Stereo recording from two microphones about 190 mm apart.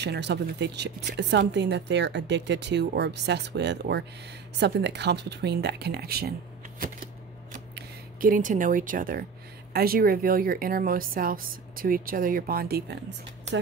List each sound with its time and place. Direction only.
0.0 s speech: 60° right (ahead or behind)
7.7 s speech: 45° right (ahead or behind)